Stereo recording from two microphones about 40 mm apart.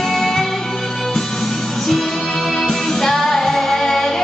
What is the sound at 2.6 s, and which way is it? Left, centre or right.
Music, centre.